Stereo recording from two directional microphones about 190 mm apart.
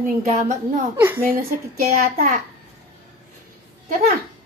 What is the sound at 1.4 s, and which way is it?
A child's voice, 50° right (ahead or behind).